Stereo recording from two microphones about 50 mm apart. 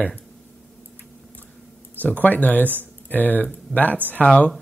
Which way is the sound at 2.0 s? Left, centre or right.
Left.